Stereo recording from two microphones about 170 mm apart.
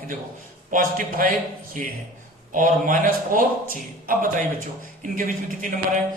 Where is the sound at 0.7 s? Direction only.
50° right (ahead or behind).